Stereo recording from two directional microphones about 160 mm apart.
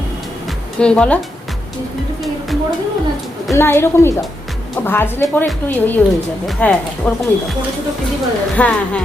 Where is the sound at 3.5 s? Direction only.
15° left (ahead or behind).